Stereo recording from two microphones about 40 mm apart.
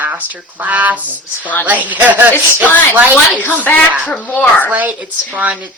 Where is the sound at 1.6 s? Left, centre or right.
Right.